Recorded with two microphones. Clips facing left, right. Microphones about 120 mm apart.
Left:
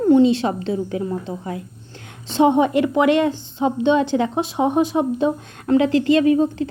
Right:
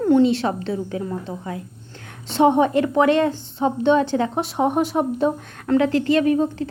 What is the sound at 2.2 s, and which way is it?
Speech, 15° left (ahead or behind).